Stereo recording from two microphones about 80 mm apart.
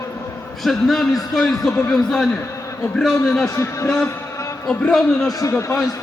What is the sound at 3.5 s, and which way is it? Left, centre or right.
Speech, left.